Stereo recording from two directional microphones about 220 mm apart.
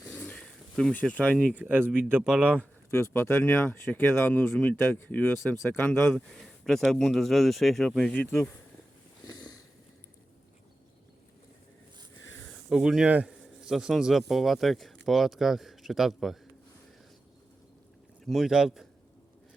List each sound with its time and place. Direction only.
0.1 s a sound: 5° left (ahead or behind)
1.5 s a man's voice: 10° right (ahead or behind)
2.9 s speech: 10° left (ahead or behind)
9.2 s sniff: 15° left (ahead or behind)
12.7 s a man's voice: centre (ahead or behind)
18.3 s a man's voice: centre (ahead or behind)